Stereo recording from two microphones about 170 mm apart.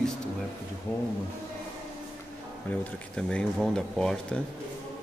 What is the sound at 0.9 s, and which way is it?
Speech, 15° left (ahead or behind).